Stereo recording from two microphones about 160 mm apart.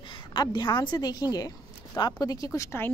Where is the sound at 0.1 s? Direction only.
30° left (ahead or behind).